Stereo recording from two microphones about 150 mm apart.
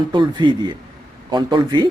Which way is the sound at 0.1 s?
30° right (ahead or behind).